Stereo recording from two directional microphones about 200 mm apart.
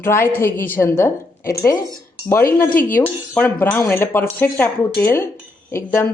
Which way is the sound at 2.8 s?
10° left (ahead or behind).